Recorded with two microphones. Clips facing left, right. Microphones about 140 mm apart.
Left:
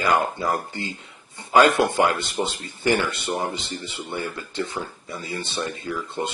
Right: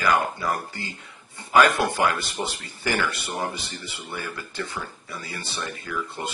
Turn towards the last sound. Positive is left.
turn(degrees=25)  # may be behind; listen again after turning